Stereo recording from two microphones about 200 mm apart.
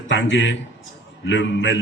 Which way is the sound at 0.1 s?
65° left (ahead or behind).